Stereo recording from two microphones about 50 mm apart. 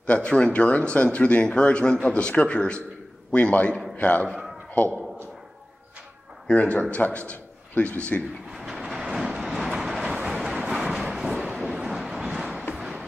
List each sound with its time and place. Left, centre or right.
0.0 s speech: left
3.9 s a man's voice: left
6.4 s a man's voice: left
8.5 s train: centre
10.2 s vehicle: centre
10.5 s a sound: centre